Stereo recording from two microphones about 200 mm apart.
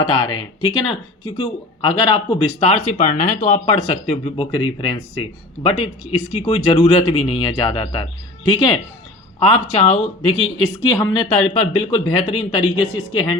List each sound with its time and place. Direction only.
0.0 s speech: 25° left (ahead or behind)
10.8 s speech: 20° left (ahead or behind)
12.8 s a woman's voice: 5° right (ahead or behind)